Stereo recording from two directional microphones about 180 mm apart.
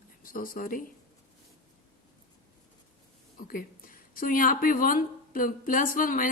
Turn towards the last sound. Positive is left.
turn(degrees=50)  # may be behind; listen again after turning